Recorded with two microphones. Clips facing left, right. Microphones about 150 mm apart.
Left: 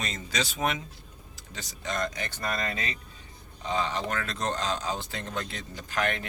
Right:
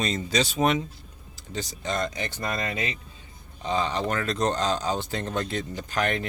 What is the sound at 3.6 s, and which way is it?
Speech, 30° right (ahead or behind).